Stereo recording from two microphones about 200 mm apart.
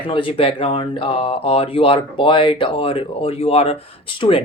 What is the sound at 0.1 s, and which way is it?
Speech, 25° left (ahead or behind).